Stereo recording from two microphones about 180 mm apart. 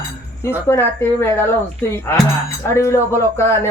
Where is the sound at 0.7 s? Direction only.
15° left (ahead or behind).